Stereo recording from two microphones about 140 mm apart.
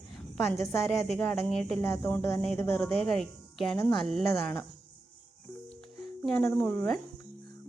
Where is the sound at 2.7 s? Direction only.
5° left (ahead or behind).